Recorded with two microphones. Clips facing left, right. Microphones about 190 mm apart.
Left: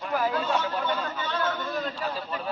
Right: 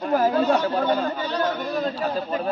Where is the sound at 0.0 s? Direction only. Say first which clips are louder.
Right 7 dB; 40° right (ahead or behind).